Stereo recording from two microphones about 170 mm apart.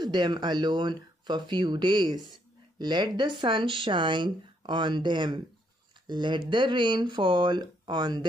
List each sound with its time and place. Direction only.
0.0 s speech: 25° right (ahead or behind)